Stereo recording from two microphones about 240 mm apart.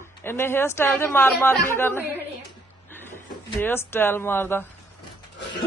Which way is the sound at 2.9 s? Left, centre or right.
Centre.